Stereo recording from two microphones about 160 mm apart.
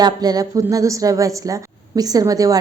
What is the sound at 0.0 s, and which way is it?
A woman's voice, 25° right (ahead or behind).